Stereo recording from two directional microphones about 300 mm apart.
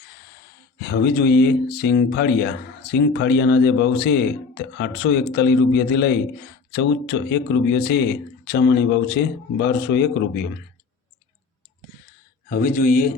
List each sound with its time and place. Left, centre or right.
0.8 s speech: left
12.5 s a man's voice: left